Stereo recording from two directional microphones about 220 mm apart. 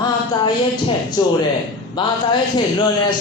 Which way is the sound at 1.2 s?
20° left (ahead or behind).